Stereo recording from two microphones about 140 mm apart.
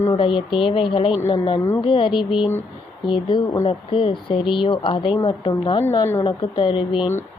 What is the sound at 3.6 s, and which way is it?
Speech, 40° left (ahead or behind).